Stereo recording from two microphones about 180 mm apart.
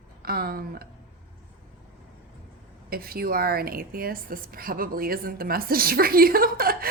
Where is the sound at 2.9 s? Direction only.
55° right (ahead or behind).